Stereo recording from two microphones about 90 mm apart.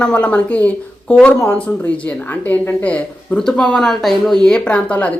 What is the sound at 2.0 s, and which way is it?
A woman's voice, 15° left (ahead or behind).